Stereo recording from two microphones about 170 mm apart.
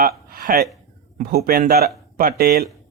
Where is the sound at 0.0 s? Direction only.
60° right (ahead or behind).